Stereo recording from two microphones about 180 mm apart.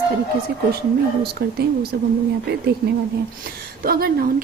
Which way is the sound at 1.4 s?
60° right (ahead or behind).